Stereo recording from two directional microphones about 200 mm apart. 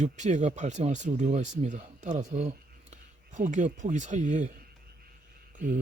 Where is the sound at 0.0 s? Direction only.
35° right (ahead or behind).